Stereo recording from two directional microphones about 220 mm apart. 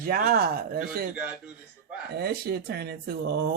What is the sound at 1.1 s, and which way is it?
Speech, 5° right (ahead or behind).